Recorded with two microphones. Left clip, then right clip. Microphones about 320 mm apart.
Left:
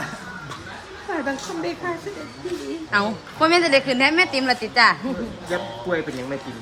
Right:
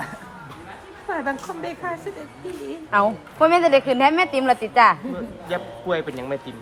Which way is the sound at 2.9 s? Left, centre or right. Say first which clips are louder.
Right 3 dB; centre.